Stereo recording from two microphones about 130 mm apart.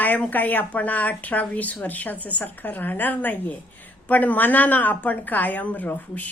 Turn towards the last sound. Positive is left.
turn(degrees=10)  # may be behind; listen again after turning